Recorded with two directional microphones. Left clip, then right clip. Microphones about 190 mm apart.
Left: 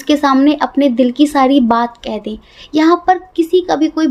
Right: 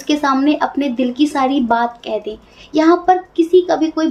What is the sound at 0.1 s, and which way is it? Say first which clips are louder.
A woman's voice: left 4 dB; 50° left (ahead or behind).